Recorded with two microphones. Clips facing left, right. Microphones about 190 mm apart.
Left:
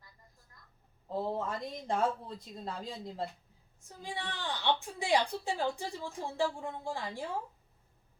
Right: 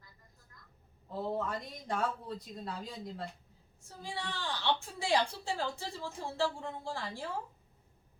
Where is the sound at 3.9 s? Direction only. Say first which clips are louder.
Even; 15° left (ahead or behind).